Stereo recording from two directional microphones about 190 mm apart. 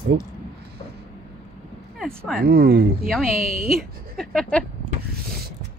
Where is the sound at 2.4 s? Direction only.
50° right (ahead or behind).